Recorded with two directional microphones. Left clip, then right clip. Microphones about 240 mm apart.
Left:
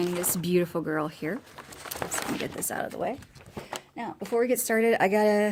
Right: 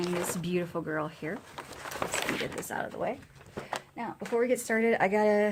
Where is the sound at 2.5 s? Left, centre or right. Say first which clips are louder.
Left 2 dB; left.